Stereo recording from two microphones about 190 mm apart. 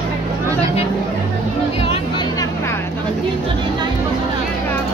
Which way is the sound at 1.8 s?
30° left (ahead or behind).